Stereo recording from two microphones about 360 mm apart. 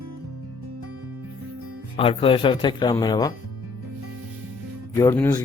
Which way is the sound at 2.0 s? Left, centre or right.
Centre.